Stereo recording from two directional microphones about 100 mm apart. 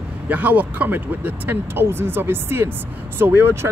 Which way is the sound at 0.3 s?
15° right (ahead or behind).